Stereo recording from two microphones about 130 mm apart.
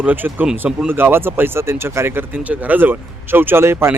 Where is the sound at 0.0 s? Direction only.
15° right (ahead or behind).